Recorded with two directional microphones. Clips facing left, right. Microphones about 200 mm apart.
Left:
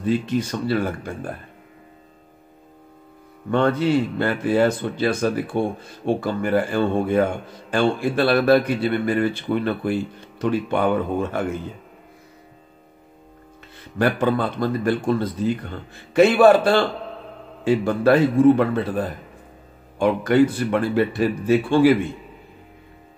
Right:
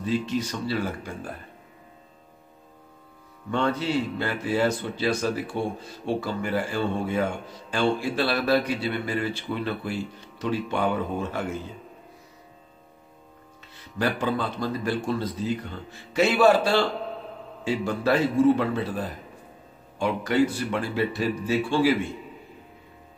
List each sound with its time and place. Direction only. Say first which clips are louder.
0.0 s speech: left 5 dB; 55° left (ahead or behind)
3.4 s speech: left 6 dB; 55° left (ahead or behind)
13.9 s speech: left 6 dB; 55° left (ahead or behind)